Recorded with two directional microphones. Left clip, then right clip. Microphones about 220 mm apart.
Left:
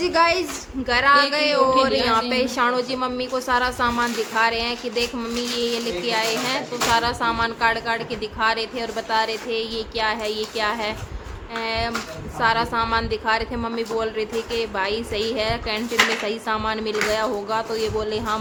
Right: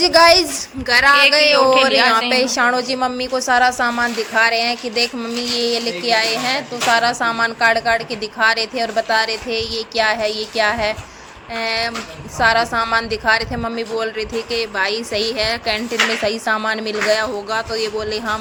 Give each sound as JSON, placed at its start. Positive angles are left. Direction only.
{"t": 0.0, "sound": "a woman's voice", "side_deg": -20}
{"t": 1.7, "sound": "speech", "side_deg": 0}
{"t": 2.3, "sound": "a woman's voice", "side_deg": -10}